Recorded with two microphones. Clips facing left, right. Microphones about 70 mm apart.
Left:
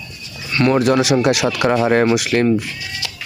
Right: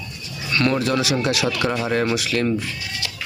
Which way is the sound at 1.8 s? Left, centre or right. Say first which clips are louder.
Left 7 dB; left.